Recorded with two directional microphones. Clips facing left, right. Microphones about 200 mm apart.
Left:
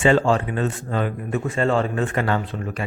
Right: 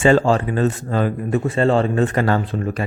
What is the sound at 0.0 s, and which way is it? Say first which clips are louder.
Speech: right 3 dB; 40° right (ahead or behind).